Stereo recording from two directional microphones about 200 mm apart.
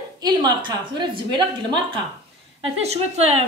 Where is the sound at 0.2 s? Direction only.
20° right (ahead or behind).